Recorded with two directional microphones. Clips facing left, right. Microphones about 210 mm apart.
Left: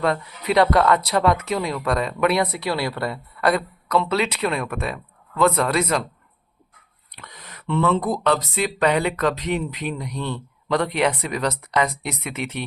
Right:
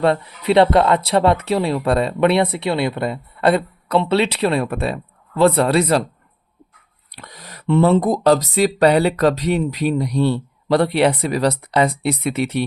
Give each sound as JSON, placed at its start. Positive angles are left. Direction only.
{"t": 0.0, "sound": "speech", "side_deg": -30}
{"t": 7.2, "sound": "speech", "side_deg": -35}